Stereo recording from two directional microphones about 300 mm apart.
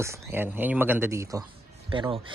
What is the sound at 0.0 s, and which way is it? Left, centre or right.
Speech, centre.